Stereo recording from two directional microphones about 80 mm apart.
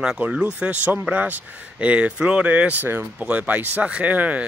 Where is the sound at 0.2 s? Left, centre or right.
Centre.